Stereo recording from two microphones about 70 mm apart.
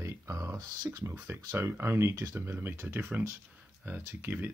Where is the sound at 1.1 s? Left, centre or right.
Right.